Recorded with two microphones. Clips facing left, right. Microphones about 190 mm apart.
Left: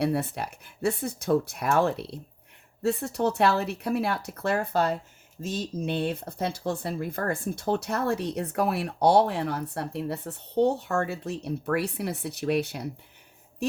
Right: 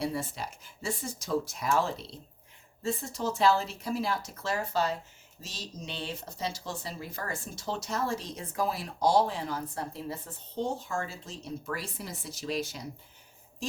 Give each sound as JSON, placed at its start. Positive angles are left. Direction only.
{"t": 0.0, "sound": "speech", "side_deg": 65}